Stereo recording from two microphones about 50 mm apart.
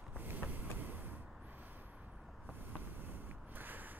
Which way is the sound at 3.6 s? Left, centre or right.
Right.